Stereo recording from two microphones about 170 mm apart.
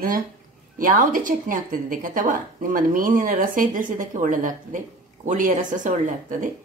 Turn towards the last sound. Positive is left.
turn(degrees=-50)  # may be behind; listen again after turning